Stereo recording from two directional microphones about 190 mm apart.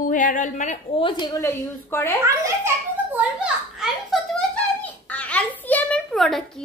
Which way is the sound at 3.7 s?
5° right (ahead or behind).